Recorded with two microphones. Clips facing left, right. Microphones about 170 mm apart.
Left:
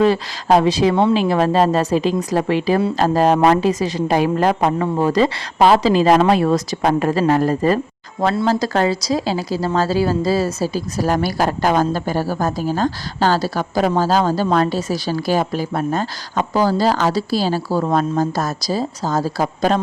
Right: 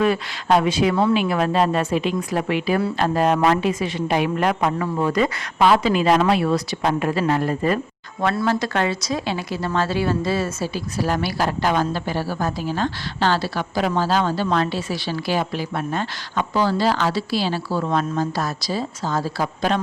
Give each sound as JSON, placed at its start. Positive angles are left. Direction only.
{"t": 0.0, "sound": "speech", "side_deg": 35}